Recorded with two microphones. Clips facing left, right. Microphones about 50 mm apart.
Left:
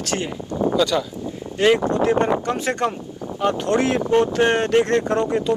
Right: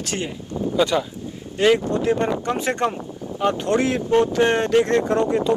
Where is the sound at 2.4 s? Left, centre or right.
Right.